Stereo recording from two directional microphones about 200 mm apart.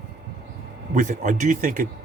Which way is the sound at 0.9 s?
40° right (ahead or behind).